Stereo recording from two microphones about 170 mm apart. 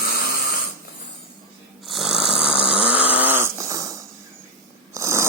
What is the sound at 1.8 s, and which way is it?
Snoring, centre (ahead or behind).